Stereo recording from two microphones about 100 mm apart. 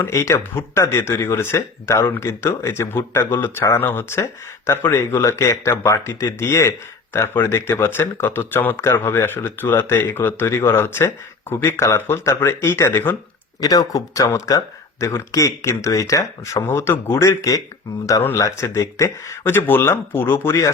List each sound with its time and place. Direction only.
0.0 s speech: 25° left (ahead or behind)
13.6 s speech: 40° left (ahead or behind)
18.2 s speech: 20° left (ahead or behind)